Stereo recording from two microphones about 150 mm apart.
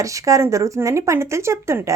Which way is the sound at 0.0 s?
20° right (ahead or behind).